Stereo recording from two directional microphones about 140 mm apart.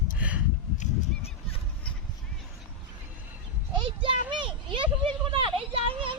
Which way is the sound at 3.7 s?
35° right (ahead or behind).